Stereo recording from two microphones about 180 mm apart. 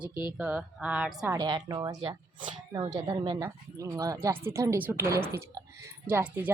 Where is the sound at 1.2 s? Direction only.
20° right (ahead or behind).